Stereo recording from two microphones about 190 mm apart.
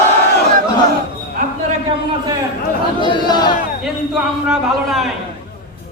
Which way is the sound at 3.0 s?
25° left (ahead or behind).